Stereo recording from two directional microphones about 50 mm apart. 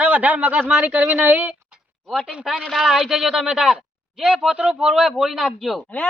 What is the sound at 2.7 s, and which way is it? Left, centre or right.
Speech, centre.